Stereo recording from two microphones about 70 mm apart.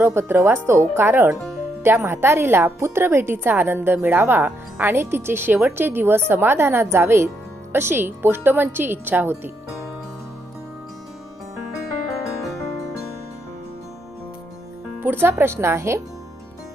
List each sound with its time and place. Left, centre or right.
0.0 s speech: right
15.0 s speech: right